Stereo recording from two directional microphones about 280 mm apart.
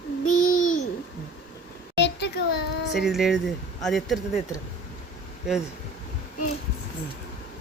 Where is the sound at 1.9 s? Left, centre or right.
Left.